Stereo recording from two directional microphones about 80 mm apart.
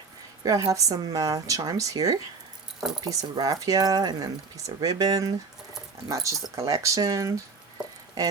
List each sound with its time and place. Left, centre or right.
0.7 s speech: right